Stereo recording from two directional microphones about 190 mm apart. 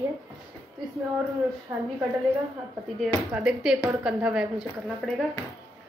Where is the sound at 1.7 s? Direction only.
10° right (ahead or behind).